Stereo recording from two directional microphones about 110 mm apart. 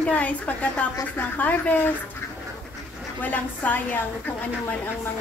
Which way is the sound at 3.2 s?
15° left (ahead or behind).